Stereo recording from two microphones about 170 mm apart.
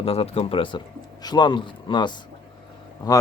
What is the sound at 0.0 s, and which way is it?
Speech, 35° left (ahead or behind).